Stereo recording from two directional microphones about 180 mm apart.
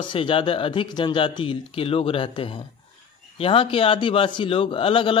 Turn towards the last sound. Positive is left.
turn(degrees=30)  # may be behind; listen again after turning